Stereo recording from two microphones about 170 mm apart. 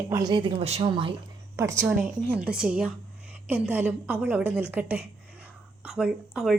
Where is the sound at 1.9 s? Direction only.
Centre (ahead or behind).